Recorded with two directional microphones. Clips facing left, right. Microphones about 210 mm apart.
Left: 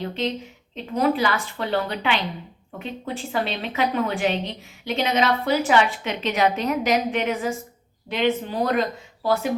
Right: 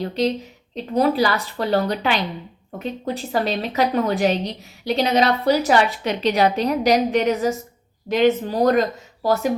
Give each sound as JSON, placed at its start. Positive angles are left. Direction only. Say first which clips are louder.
{"t": 0.0, "sound": "a woman's voice", "louder": "right 5 dB", "side_deg": -40}